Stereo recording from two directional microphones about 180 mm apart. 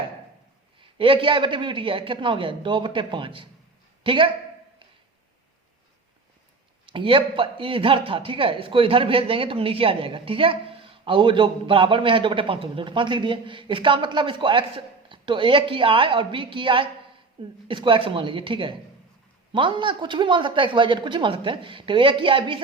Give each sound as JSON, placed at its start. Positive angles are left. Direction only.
{"t": 0.8, "sound": "a man's voice", "side_deg": -30}
{"t": 6.8, "sound": "a man's voice", "side_deg": -30}